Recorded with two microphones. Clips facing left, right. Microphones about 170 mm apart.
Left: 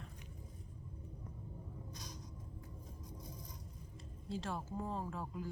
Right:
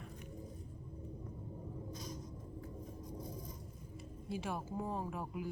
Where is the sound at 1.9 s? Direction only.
75° left (ahead or behind).